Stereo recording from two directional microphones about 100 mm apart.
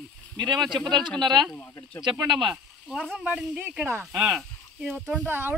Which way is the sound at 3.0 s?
Centre (ahead or behind).